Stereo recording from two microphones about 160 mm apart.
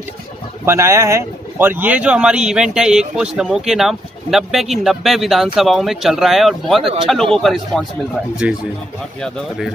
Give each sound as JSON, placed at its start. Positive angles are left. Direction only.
{"t": 0.7, "sound": "speech", "side_deg": -15}
{"t": 6.8, "sound": "speech", "side_deg": -35}
{"t": 7.1, "sound": "speech", "side_deg": 5}